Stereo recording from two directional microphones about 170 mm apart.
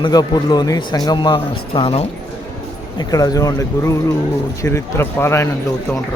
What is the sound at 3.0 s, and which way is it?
A man's voice, 20° left (ahead or behind).